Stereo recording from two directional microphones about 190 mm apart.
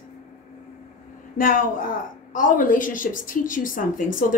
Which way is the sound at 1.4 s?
45° left (ahead or behind).